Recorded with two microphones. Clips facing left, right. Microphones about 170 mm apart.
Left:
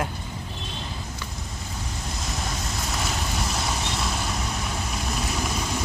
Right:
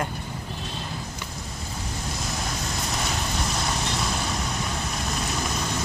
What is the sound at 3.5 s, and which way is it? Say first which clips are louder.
Vehicle: right 1 dB; centre (ahead or behind).